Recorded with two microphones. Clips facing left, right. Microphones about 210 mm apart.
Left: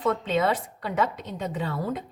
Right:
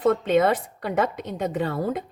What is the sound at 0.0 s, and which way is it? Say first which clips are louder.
Speech: right 5 dB; 55° right (ahead or behind).